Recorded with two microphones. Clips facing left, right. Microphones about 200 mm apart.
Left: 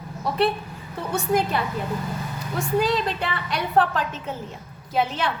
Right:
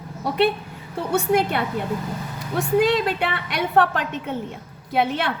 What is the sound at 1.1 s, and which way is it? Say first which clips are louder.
A woman's voice: right 3 dB; 65° right (ahead or behind).